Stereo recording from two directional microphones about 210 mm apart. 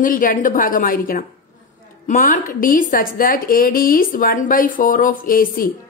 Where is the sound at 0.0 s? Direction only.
40° left (ahead or behind).